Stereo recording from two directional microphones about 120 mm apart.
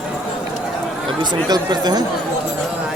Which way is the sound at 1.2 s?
35° right (ahead or behind).